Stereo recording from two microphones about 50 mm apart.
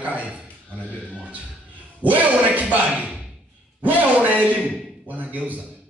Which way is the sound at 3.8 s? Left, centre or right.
Right.